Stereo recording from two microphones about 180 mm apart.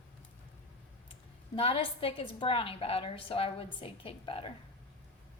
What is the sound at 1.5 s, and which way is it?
A woman's voice, 30° left (ahead or behind).